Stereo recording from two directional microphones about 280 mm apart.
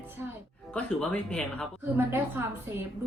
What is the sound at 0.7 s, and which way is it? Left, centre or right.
Speech, centre.